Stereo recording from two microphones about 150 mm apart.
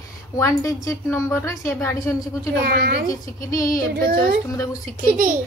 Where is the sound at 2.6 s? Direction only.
90° right.